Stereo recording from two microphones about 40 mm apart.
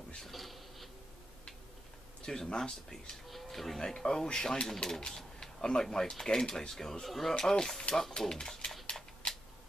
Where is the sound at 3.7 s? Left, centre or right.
Centre.